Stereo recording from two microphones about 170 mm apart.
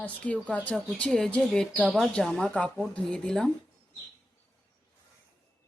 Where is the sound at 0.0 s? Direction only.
10° left (ahead or behind).